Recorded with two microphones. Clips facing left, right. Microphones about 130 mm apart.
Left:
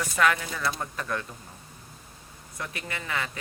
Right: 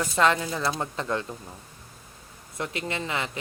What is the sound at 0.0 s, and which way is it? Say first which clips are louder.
A woman's voice: right 2 dB; 25° right (ahead or behind).